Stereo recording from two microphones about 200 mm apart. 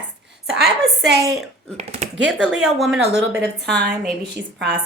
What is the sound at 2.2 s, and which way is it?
Speech, 5° right (ahead or behind).